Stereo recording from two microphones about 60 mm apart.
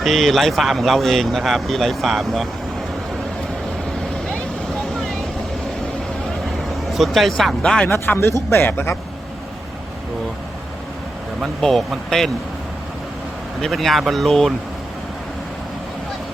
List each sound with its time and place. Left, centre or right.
0.0 s speech: centre
6.9 s speech: centre
8.0 s speech: left
11.6 s speech: centre
13.6 s speech: centre